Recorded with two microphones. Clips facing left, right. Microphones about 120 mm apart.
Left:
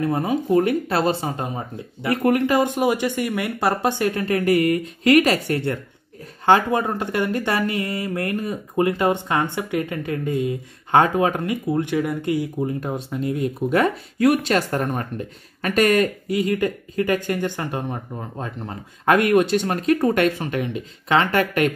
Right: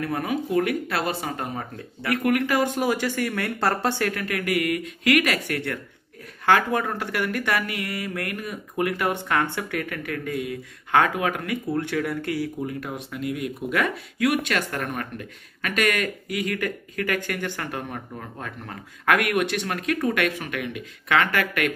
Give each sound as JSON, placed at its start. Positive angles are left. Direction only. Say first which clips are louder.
{"t": 0.0, "sound": "speech", "louder": "left 5 dB", "side_deg": 25}